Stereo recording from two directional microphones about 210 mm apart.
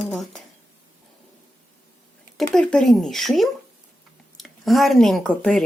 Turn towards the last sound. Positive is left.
turn(degrees=0)  # may be behind; listen again after turning